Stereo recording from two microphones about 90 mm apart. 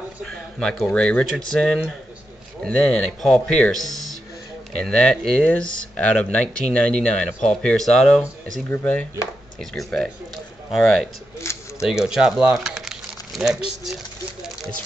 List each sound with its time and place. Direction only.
0.2 s a sound: 10° left (ahead or behind)
0.8 s speech: 10° left (ahead or behind)
8.6 s speech: 20° left (ahead or behind)
9.6 s speech: 5° left (ahead or behind)
11.4 s a sound: 30° left (ahead or behind)
11.8 s speech: 5° right (ahead or behind)